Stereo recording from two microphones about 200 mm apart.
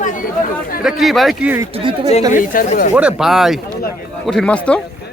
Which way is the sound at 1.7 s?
30° right (ahead or behind).